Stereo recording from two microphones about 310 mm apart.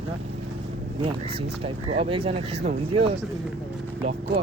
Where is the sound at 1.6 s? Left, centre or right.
Centre.